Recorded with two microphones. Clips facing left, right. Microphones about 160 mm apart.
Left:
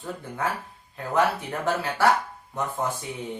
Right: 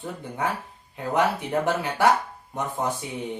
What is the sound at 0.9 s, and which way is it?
Speech, 20° right (ahead or behind).